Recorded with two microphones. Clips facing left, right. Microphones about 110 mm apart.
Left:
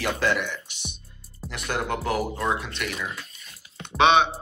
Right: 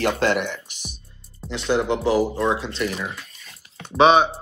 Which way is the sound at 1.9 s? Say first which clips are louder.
Right 6 dB; 25° right (ahead or behind).